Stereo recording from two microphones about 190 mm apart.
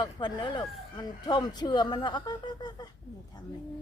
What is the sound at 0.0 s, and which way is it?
Speech, 20° left (ahead or behind).